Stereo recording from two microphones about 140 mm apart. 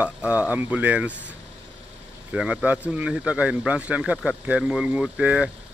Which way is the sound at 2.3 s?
5° right (ahead or behind).